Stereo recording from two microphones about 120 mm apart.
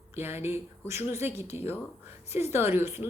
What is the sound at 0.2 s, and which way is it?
A woman's voice, 20° right (ahead or behind).